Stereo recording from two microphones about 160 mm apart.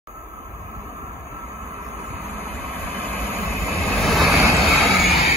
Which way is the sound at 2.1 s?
15° left (ahead or behind).